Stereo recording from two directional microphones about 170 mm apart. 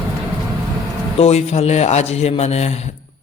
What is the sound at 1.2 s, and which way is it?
Speech, 40° left (ahead or behind).